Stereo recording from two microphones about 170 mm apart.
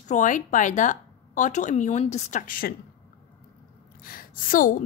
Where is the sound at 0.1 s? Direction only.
50° left (ahead or behind).